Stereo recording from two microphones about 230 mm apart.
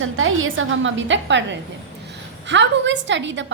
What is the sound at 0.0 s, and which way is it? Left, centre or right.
A woman's voice, right.